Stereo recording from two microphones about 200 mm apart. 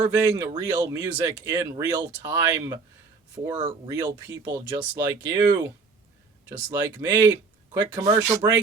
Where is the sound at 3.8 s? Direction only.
15° right (ahead or behind).